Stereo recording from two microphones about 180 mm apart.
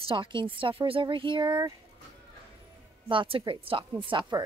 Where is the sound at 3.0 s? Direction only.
30° right (ahead or behind).